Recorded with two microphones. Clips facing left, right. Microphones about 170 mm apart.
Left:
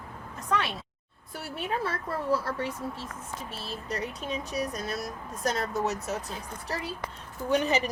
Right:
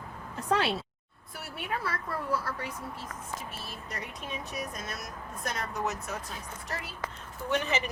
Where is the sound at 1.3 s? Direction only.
30° left (ahead or behind).